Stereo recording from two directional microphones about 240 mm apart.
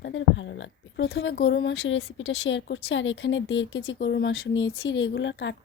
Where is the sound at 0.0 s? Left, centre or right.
Left.